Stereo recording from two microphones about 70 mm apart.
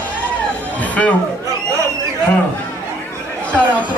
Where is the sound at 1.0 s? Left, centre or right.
Centre.